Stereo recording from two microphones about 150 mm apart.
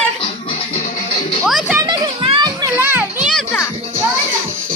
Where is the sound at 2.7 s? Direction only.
15° right (ahead or behind).